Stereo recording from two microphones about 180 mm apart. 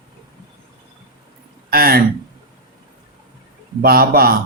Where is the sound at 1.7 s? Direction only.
55° right (ahead or behind).